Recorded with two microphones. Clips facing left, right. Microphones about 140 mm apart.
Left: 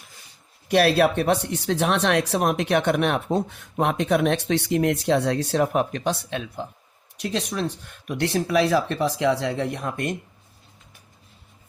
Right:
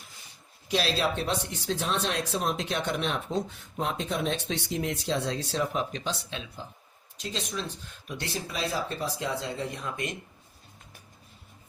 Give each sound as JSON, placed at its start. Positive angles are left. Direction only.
{"t": 0.7, "sound": "speech", "side_deg": 60}